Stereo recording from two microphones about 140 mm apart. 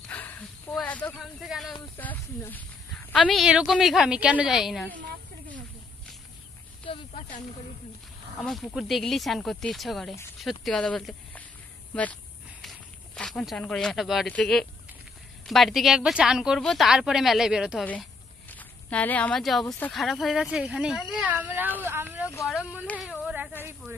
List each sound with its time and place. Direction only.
0.1 s a sound: 15° left (ahead or behind)
0.7 s snake: 10° left (ahead or behind)
1.2 s a woman's voice: centre (ahead or behind)
2.0 s a woman's voice: 10° left (ahead or behind); by 4.8 s 5° right (ahead or behind)
6.9 s speech: 40° left (ahead or behind)
8.4 s a woman's voice: centre (ahead or behind)
12.6 s snake: 5° left (ahead or behind)
14.2 s a woman's voice: 5° left (ahead or behind)
18.5 s a woman's voice: 10° left (ahead or behind); by 21.4 s 10° right (ahead or behind)
21.4 s a sound: 15° right (ahead or behind)
22.5 s a woman's voice: 5° right (ahead or behind)
23.2 s a sound: 5° right (ahead or behind)